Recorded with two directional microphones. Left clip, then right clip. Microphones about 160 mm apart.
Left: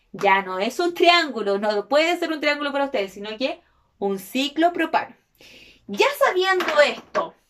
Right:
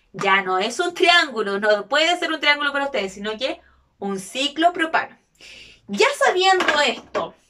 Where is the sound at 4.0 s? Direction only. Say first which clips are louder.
Left 1 dB; 25° left (ahead or behind).